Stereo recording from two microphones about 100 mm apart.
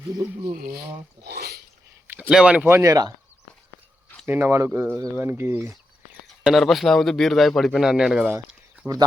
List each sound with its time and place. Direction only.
0.2 s speech: 30° right (ahead or behind)
2.0 s a sound: 15° right (ahead or behind)
2.3 s speech: 10° right (ahead or behind)
2.6 s speech: 30° right (ahead or behind)
4.3 s speech: 20° right (ahead or behind)
6.4 s a man's voice: centre (ahead or behind)